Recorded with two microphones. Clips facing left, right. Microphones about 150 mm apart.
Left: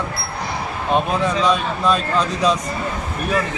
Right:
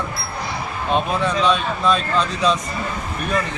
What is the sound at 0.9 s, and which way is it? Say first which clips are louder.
A man's voice: left 1 dB; 10° left (ahead or behind).